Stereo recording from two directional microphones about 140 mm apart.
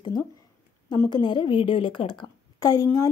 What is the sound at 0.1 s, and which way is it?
A woman's voice, 30° left (ahead or behind).